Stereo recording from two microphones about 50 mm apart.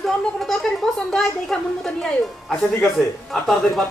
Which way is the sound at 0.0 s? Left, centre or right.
Centre.